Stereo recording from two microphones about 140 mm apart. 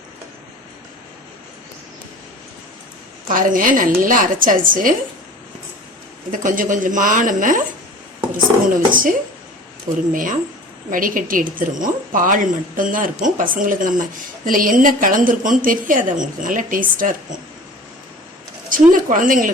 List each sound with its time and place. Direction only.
3.2 s a woman's voice: 75° right (ahead or behind)
6.3 s a woman's voice: 70° right (ahead or behind)
8.7 s a woman's voice: 75° right (ahead or behind)
18.7 s a woman's voice: 70° right (ahead or behind)